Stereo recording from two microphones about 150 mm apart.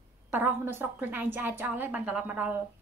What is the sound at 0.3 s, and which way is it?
A woman's voice, 15° right (ahead or behind).